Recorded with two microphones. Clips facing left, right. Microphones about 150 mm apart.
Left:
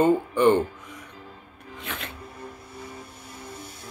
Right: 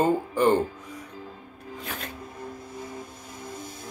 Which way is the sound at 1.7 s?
40° right (ahead or behind).